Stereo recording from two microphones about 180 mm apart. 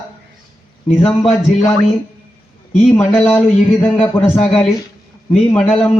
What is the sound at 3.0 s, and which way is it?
A man's voice, 15° left (ahead or behind).